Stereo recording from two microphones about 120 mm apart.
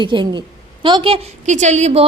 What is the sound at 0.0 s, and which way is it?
A woman's voice, 40° right (ahead or behind).